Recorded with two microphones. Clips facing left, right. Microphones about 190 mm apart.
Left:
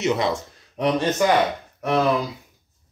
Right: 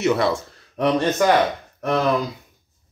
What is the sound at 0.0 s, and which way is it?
Speech, 20° left (ahead or behind).